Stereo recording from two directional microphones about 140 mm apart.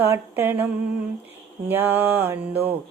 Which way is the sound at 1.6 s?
15° right (ahead or behind).